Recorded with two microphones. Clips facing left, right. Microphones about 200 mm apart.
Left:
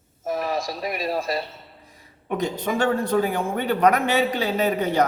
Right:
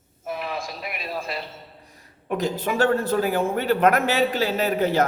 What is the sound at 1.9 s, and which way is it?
A man's voice, centre (ahead or behind).